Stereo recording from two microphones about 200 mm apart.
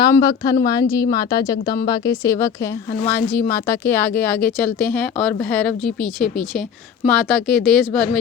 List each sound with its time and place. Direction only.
0.0 s a woman's voice: 20° left (ahead or behind); by 8.2 s centre (ahead or behind)